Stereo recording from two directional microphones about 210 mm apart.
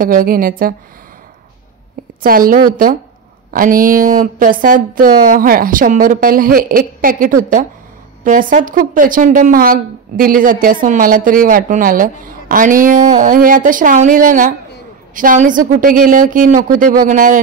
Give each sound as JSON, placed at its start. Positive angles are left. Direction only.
{"t": 0.0, "sound": "a woman's voice", "side_deg": -40}
{"t": 2.2, "sound": "a woman's voice", "side_deg": -45}